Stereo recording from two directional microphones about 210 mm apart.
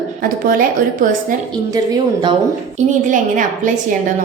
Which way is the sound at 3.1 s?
40° right (ahead or behind).